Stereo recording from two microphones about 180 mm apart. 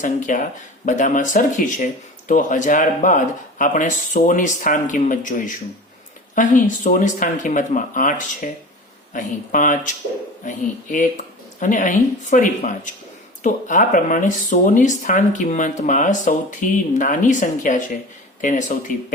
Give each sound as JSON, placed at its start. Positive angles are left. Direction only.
{"t": 0.0, "sound": "speech", "side_deg": 45}